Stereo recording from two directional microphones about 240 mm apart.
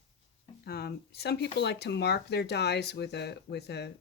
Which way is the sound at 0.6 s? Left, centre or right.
Left.